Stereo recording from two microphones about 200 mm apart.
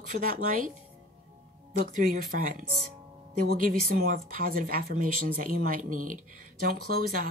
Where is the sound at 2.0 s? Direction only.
40° right (ahead or behind).